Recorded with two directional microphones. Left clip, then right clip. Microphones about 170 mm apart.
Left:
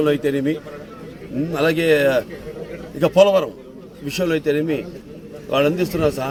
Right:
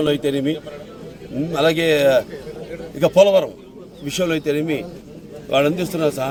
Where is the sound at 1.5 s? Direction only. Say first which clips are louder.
Even; 10° right (ahead or behind).